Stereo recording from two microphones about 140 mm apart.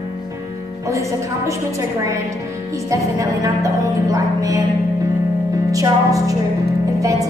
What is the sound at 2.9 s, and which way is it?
A woman's voice, 20° right (ahead or behind).